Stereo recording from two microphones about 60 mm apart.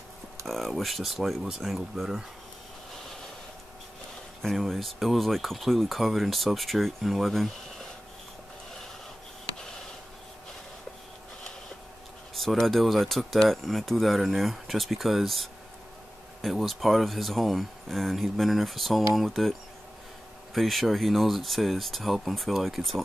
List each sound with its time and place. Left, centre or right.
0.5 s speech: centre
4.4 s speech: centre
12.4 s speech: centre
20.5 s speech: centre